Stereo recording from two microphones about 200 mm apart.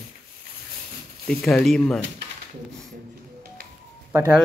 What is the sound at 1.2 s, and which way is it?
Speech, centre (ahead or behind).